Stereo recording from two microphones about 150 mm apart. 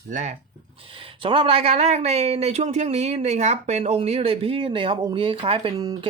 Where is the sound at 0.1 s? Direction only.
55° right (ahead or behind).